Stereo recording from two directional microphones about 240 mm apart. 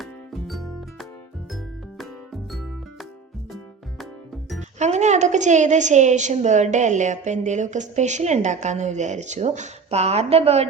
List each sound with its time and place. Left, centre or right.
0.0 s music: centre
4.8 s a woman's voice: right